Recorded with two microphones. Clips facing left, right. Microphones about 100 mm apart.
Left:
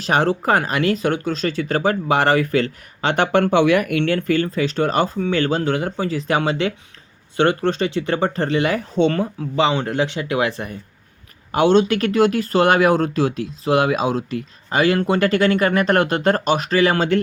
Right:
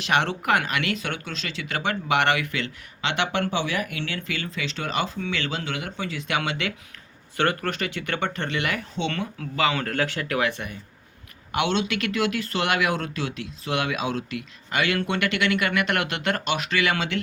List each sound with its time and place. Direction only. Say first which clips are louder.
0.0 s speech: left 6 dB; 35° left (ahead or behind)